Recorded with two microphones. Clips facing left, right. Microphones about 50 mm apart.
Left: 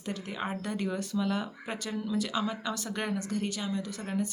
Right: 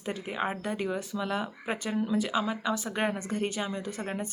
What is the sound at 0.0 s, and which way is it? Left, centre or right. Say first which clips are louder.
Speech: right 3 dB; centre.